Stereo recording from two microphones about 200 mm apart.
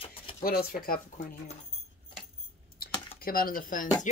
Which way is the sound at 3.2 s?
45° left (ahead or behind).